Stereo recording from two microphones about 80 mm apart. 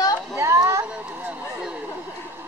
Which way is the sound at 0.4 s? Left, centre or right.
Right.